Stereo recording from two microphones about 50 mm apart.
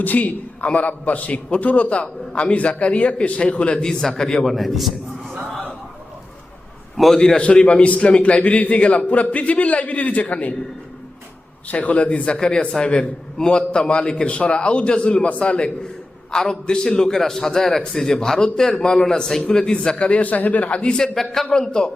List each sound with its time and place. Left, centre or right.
0.0 s a man's voice: left; by 4.1 s centre
4.4 s a man's voice: centre
6.9 s a man's voice: centre
7.2 s a man's voice: centre
11.7 s a man's voice: left
21.2 s a man's voice: centre
21.5 s a man's voice: centre